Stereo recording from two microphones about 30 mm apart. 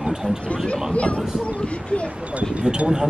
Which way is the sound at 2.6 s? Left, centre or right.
Right.